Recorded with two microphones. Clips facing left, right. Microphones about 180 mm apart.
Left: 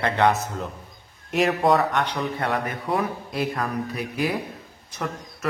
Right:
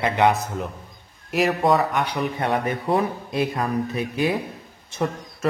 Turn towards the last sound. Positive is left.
turn(degrees=-25)  # may be behind; listen again after turning